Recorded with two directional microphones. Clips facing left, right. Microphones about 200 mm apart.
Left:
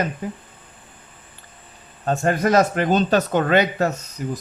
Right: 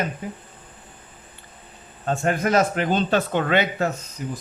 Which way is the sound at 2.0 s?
40° left (ahead or behind).